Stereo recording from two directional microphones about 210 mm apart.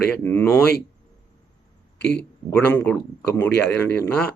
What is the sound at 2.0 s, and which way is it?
Speech, 50° left (ahead or behind).